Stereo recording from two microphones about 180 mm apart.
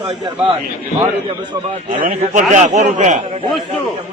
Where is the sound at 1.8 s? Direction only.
45° right (ahead or behind).